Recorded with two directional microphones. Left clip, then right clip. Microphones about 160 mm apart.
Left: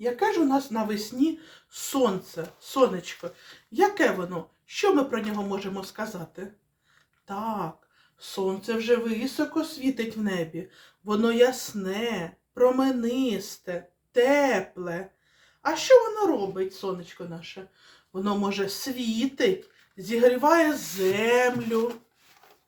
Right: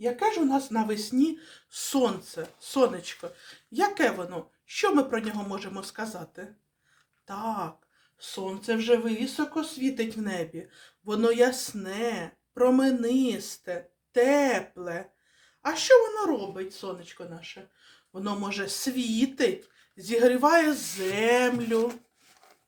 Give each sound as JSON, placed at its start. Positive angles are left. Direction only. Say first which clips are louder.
{"t": 0.0, "sound": "speech", "louder": "left 2 dB", "side_deg": -25}
{"t": 18.1, "sound": "speech", "louder": "left 4 dB", "side_deg": -25}